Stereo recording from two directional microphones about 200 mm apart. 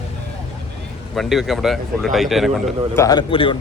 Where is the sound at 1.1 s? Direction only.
Centre (ahead or behind).